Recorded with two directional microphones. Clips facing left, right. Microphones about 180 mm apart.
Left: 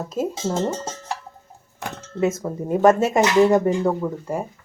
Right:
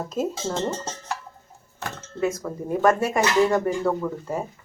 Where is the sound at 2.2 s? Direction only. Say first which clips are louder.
Left 3 dB; 20° left (ahead or behind).